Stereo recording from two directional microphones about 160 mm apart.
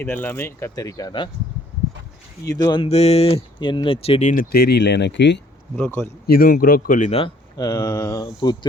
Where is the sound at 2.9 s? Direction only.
40° left (ahead or behind); by 5.4 s 90° left.